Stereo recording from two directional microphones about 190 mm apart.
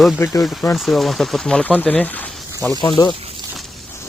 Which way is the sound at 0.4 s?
5° left (ahead or behind).